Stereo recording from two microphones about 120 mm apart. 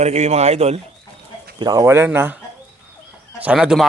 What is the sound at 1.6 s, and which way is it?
A man's voice, 30° right (ahead or behind).